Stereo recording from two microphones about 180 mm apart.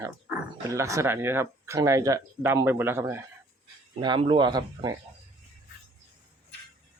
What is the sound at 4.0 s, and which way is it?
Speech, 25° right (ahead or behind).